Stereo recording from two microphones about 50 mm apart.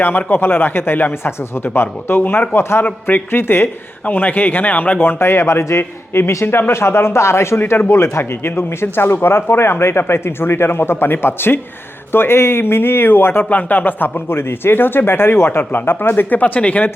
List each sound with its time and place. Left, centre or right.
0.3 s speech: left
4.0 s speech: left
4.9 s a man's voice: left
13.4 s speech: left
16.6 s speech: left